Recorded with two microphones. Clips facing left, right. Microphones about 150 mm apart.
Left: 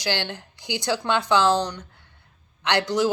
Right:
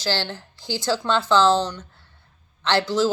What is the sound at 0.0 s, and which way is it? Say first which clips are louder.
A man's voice: right 1 dB; 15° left (ahead or behind).